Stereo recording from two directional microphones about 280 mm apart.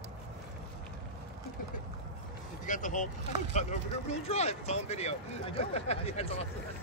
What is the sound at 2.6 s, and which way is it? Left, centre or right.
Vehicle, left.